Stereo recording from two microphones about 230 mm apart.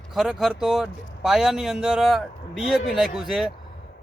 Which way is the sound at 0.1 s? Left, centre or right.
Centre.